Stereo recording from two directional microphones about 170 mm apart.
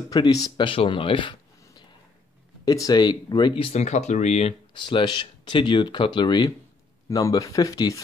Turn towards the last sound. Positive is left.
turn(degrees=20)  # may be behind; listen again after turning